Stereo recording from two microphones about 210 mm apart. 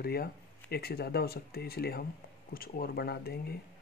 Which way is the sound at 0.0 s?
45° left (ahead or behind).